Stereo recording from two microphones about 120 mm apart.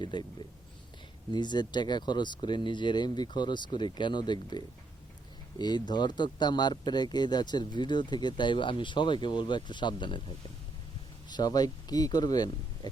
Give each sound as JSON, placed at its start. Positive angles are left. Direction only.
{"t": 0.0, "sound": "speech", "side_deg": 40}
{"t": 1.3, "sound": "speech", "side_deg": 40}
{"t": 11.3, "sound": "speech", "side_deg": 35}